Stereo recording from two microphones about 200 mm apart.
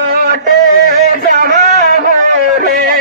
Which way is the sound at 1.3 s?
50° right (ahead or behind).